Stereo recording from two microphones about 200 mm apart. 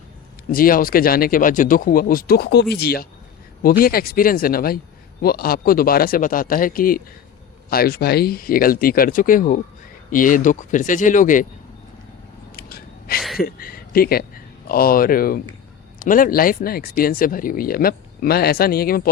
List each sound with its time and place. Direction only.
0.5 s speech: 45° left (ahead or behind)
12.5 s gasp: 50° left (ahead or behind)
13.4 s speech: 50° left (ahead or behind)